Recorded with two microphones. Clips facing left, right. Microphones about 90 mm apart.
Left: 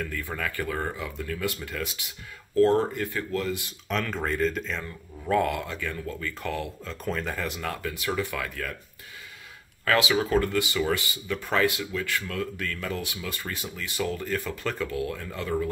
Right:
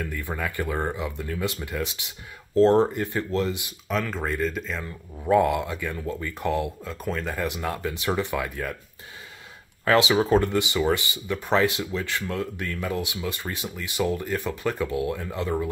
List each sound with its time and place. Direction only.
0.0 s speech: 15° right (ahead or behind)
3.9 s speech: 5° right (ahead or behind)
5.2 s speech: 15° right (ahead or behind); by 7.3 s centre (ahead or behind)
7.3 s speech: 15° right (ahead or behind)
9.8 s speech: 25° right (ahead or behind)